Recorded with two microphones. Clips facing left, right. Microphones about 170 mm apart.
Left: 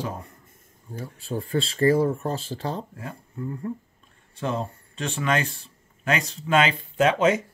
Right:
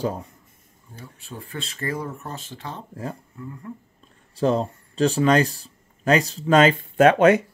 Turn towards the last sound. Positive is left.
turn(degrees=-60)  # may be behind; listen again after turning